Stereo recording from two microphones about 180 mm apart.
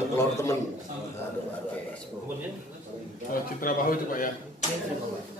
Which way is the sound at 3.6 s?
50° left (ahead or behind).